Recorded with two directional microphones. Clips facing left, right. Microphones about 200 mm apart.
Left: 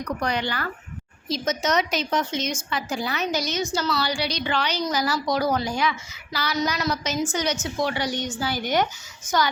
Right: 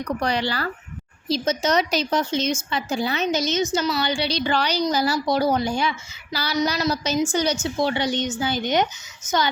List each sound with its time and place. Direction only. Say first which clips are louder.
0.2 s a woman's voice: right 2 dB; 35° right (ahead or behind)